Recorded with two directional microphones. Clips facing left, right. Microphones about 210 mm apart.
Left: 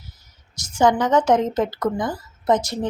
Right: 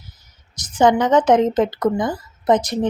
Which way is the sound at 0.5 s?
20° right (ahead or behind).